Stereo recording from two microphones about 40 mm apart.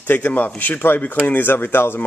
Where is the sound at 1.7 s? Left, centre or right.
Left.